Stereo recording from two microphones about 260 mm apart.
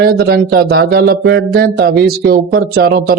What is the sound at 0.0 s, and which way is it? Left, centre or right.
Speech, right.